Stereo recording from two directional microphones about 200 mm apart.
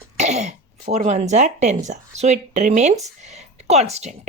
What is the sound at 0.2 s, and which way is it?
A woman's voice, 35° right (ahead or behind).